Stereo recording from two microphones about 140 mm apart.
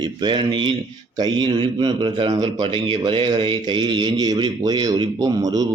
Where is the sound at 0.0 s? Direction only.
30° right (ahead or behind).